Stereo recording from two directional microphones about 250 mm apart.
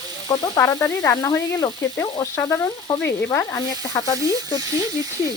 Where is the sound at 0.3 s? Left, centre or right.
Centre.